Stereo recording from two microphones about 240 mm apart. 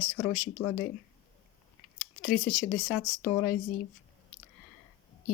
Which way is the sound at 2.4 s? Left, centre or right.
Left.